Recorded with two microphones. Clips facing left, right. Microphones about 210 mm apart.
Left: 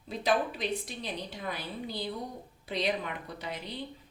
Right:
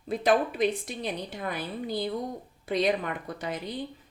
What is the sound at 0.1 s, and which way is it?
Speech, 50° right (ahead or behind).